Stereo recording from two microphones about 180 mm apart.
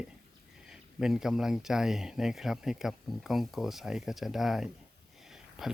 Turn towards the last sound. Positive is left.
turn(degrees=0)  # may be behind; listen again after turning